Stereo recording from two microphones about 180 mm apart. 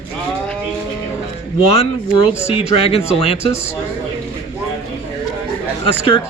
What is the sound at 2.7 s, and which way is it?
Speech, 30° left (ahead or behind).